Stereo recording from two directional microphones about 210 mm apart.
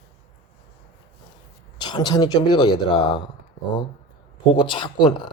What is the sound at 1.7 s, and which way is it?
Speech, 20° left (ahead or behind).